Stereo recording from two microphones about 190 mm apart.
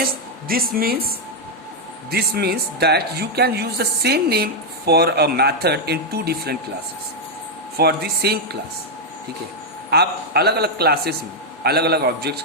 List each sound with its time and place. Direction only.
0.0 s speech: 50° right (ahead or behind)
2.0 s speech: 55° right (ahead or behind)
7.8 s speech: 60° right (ahead or behind)
9.9 s speech: 60° right (ahead or behind)